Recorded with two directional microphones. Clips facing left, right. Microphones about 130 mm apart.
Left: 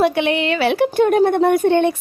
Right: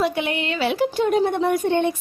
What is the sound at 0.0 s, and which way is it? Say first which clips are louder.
A woman's voice: left 6 dB; 80° left.